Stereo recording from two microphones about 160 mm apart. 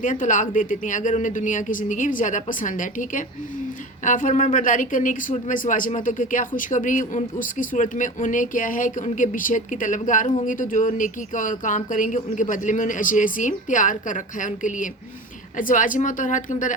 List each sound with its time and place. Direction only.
0.0 s a woman's voice: 55° left (ahead or behind)